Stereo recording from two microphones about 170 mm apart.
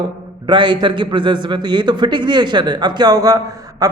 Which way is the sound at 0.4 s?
25° right (ahead or behind).